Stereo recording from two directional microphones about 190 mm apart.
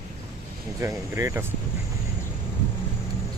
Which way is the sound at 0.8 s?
15° right (ahead or behind).